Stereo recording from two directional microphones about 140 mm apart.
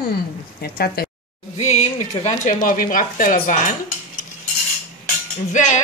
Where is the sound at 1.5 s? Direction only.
55° left (ahead or behind).